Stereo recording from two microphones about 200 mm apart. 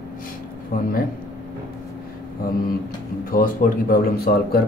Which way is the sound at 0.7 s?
45° left (ahead or behind).